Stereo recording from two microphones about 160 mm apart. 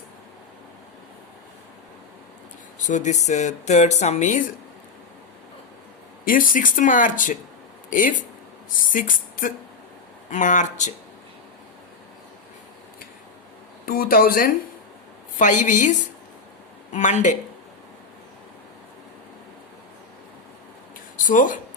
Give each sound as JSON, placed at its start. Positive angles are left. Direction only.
{"t": 2.7, "sound": "speech", "side_deg": 50}
{"t": 6.2, "sound": "speech", "side_deg": 60}
{"t": 13.8, "sound": "speech", "side_deg": 65}
{"t": 15.4, "sound": "speech", "side_deg": 50}
{"t": 21.2, "sound": "speech", "side_deg": 55}